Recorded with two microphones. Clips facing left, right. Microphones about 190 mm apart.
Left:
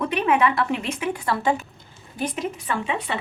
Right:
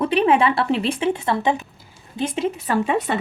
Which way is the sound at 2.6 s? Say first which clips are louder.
Right 6 dB; 40° right (ahead or behind).